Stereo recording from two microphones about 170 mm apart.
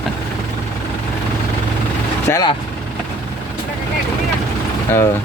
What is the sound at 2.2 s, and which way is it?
Speech, 20° left (ahead or behind).